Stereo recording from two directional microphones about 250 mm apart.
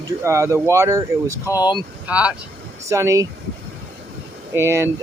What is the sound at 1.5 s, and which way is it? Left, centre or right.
Speech, centre.